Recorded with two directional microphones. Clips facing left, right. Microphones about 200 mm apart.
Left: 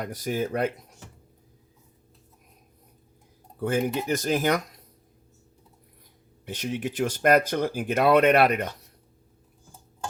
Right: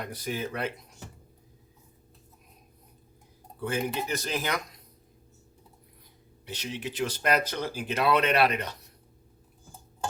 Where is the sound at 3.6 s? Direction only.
45° left (ahead or behind).